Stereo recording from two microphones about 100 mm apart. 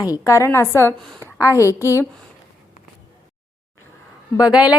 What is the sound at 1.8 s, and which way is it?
Speech, 25° right (ahead or behind).